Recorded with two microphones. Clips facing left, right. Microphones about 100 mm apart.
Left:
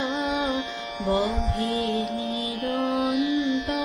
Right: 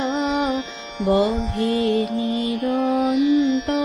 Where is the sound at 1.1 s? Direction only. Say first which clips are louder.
Right 5 dB; centre (ahead or behind).